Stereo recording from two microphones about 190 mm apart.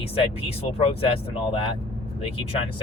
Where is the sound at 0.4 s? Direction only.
30° left (ahead or behind).